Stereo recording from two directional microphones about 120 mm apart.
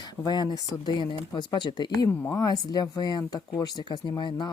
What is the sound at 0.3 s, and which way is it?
Speech, 35° left (ahead or behind).